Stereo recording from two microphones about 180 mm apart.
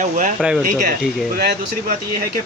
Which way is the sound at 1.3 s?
60° right (ahead or behind).